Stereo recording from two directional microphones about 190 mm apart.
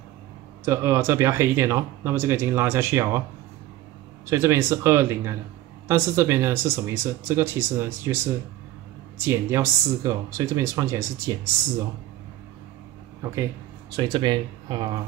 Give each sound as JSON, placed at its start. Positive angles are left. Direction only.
{"t": 0.7, "sound": "speech", "side_deg": -15}
{"t": 4.3, "sound": "speech", "side_deg": -15}
{"t": 9.2, "sound": "speech", "side_deg": -10}
{"t": 13.2, "sound": "speech", "side_deg": -15}